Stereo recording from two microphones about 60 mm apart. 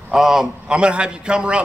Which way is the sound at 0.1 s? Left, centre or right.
Centre.